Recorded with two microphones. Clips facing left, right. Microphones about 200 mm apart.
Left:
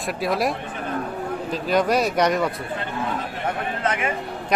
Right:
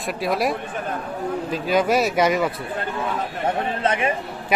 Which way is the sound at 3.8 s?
25° right (ahead or behind).